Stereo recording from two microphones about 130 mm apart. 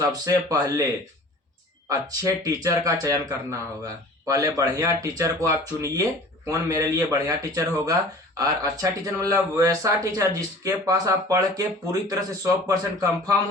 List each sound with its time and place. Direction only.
0.0 s speech: 25° right (ahead or behind)
1.9 s speech: 25° right (ahead or behind)